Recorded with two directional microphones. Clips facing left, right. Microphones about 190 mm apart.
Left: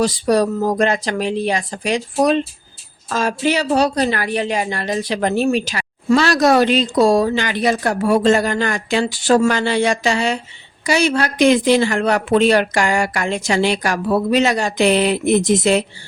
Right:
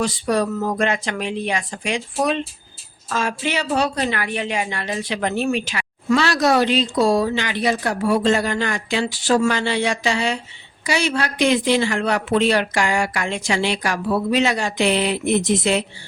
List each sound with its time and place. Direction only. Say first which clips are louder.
0.0 s a woman's voice: left 5 dB; 35° left (ahead or behind)